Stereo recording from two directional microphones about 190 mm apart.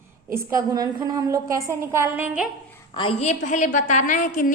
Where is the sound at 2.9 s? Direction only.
30° left (ahead or behind); by 4.5 s 45° left (ahead or behind).